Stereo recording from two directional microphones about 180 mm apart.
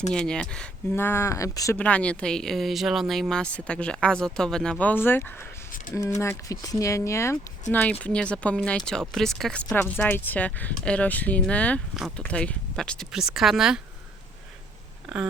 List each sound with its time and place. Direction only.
0.1 s speech: 5° left (ahead or behind)
1.8 s speech: 5° left (ahead or behind)